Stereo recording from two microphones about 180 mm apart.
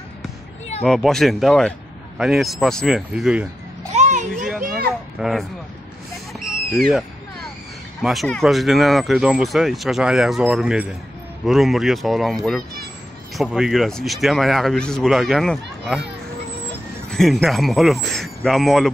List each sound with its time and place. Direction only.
0.8 s speech: centre (ahead or behind)
3.9 s a sound: 40° right (ahead or behind)
5.2 s speech: centre (ahead or behind)
6.7 s speech: centre (ahead or behind)
17.1 s speech: centre (ahead or behind)